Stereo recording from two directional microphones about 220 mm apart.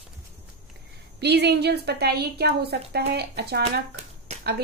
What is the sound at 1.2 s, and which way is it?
A woman's voice, 50° right (ahead or behind).